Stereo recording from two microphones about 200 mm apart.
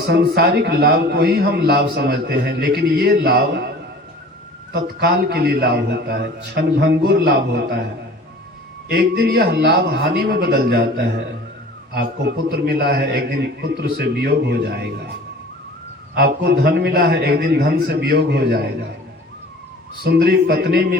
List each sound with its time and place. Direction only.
0.0 s a man's voice: 55° right (ahead or behind)
4.7 s a man's voice: 55° right (ahead or behind)
8.9 s a man's voice: 55° right (ahead or behind)
16.1 s a man's voice: 55° right (ahead or behind)
20.1 s a man's voice: 55° right (ahead or behind)